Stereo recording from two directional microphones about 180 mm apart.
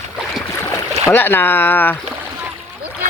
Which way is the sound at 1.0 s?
10° left (ahead or behind).